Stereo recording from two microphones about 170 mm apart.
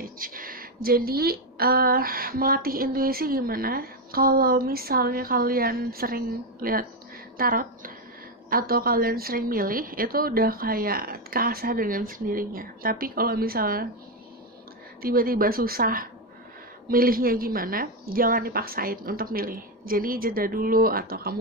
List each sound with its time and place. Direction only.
0.0 s speech: 55° right (ahead or behind)
15.0 s speech: 60° right (ahead or behind)